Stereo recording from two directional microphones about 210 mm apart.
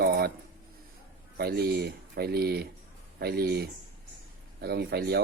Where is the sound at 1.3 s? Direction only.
50° right (ahead or behind).